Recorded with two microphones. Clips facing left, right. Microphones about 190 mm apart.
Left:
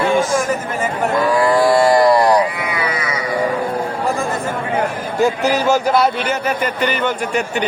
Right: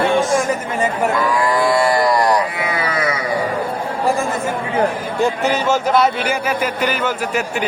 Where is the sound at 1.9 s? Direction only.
25° left (ahead or behind).